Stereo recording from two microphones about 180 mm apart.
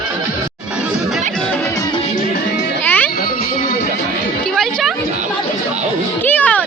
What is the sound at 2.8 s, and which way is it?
Music, 10° left (ahead or behind).